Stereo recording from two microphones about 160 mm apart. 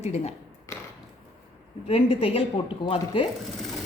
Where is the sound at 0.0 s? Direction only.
45° left (ahead or behind).